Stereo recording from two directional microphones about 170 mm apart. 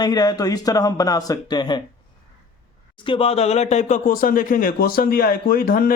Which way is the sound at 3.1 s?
35° left (ahead or behind).